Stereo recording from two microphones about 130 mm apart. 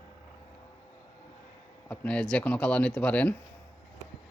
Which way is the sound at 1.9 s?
10° left (ahead or behind).